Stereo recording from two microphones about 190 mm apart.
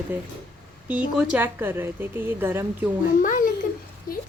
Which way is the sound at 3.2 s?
45° left (ahead or behind).